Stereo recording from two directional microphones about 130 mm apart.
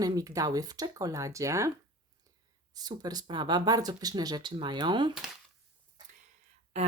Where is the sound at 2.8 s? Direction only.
30° right (ahead or behind).